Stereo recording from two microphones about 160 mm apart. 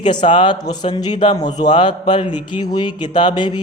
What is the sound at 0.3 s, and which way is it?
Speech, 30° left (ahead or behind).